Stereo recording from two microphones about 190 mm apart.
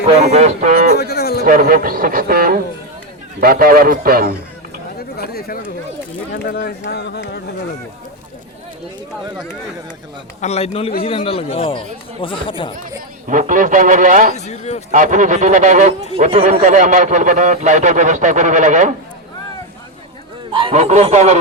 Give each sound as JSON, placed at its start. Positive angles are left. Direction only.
{"t": 0.3, "sound": "speech", "side_deg": -40}
{"t": 0.9, "sound": "a sound", "side_deg": 55}
{"t": 1.5, "sound": "speech", "side_deg": -45}
{"t": 4.9, "sound": "chatter", "side_deg": 55}
{"t": 6.3, "sound": "speech", "side_deg": 50}
{"t": 10.4, "sound": "a man's voice", "side_deg": 35}
{"t": 13.2, "sound": "speech", "side_deg": -45}
{"t": 14.3, "sound": "a man's voice", "side_deg": 35}
{"t": 14.9, "sound": "speech", "side_deg": -40}
{"t": 20.5, "sound": "speech", "side_deg": -25}